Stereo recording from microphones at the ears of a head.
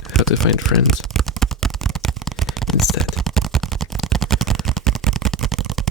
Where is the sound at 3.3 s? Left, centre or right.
Right.